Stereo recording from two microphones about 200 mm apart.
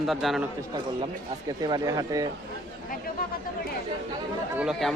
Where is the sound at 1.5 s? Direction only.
20° right (ahead or behind).